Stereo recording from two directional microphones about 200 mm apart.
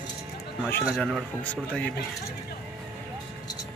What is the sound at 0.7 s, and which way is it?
Speech, centre (ahead or behind).